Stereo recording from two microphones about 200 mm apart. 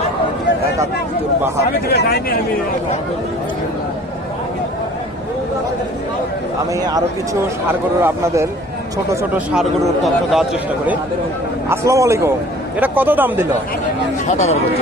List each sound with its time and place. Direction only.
1.9 s speech: 55° left (ahead or behind)
7.7 s speech: 10° right (ahead or behind)
9.5 s a man's voice: centre (ahead or behind)
11.7 s speech: 15° right (ahead or behind)
14.3 s speech: 35° left (ahead or behind)